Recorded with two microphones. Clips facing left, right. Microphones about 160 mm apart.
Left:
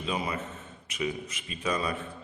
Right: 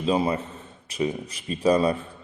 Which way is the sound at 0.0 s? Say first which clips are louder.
Right 9 dB; 30° right (ahead or behind).